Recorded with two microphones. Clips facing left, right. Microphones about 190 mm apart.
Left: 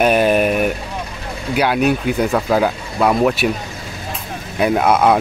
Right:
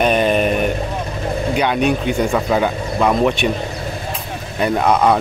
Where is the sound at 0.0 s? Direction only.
5° left (ahead or behind).